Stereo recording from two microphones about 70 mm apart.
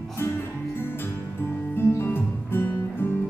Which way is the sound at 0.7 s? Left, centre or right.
Left.